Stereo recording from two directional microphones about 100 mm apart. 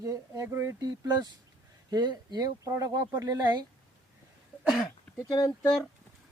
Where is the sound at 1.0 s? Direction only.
45° right (ahead or behind).